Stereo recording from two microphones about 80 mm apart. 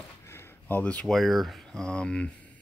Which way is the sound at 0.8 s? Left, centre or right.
Centre.